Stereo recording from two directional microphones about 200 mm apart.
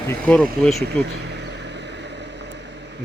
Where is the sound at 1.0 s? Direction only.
55° right (ahead or behind).